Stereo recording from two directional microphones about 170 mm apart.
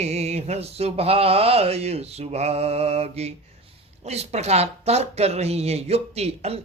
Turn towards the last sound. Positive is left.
turn(degrees=-40)  # may be behind; listen again after turning